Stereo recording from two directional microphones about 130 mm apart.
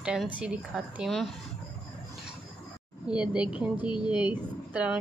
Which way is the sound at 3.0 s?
10° right (ahead or behind).